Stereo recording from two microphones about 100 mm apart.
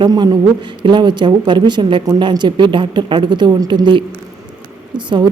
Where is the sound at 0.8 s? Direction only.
50° right (ahead or behind).